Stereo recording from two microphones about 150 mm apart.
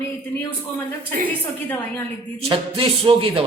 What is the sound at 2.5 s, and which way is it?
Speech, 40° right (ahead or behind).